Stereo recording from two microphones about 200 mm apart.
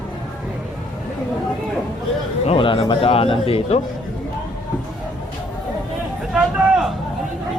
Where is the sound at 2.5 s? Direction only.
25° left (ahead or behind).